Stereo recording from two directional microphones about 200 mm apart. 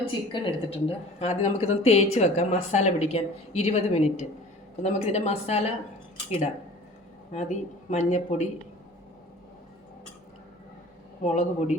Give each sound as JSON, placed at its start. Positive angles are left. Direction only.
{"t": 0.3, "sound": "a woman's voice", "side_deg": 30}
{"t": 7.3, "sound": "a woman's voice", "side_deg": 35}
{"t": 11.2, "sound": "a woman's voice", "side_deg": 40}